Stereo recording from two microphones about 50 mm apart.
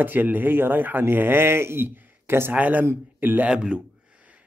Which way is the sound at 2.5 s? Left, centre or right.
Right.